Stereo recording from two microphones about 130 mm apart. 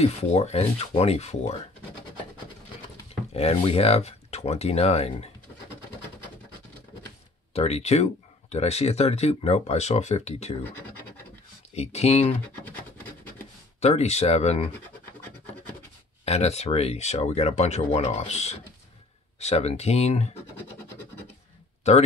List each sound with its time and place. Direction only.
0.0 s speech: 55° left (ahead or behind)
3.3 s speech: 50° left (ahead or behind)
7.5 s speech: 55° left (ahead or behind)
10.6 s speech: 15° left (ahead or behind)
11.7 s speech: 55° left (ahead or behind)
12.6 s rub: 15° left (ahead or behind)
13.7 s speech: 55° left (ahead or behind)
16.3 s speech: 55° left (ahead or behind)
21.8 s speech: 55° left (ahead or behind)